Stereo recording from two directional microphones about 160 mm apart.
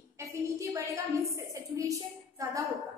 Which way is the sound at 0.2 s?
20° right (ahead or behind).